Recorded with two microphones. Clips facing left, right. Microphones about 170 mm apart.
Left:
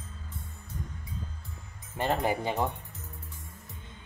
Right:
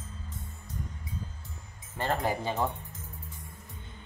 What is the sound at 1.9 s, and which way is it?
Speech, 15° left (ahead or behind).